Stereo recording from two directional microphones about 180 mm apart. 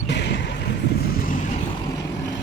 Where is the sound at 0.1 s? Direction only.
70° left (ahead or behind).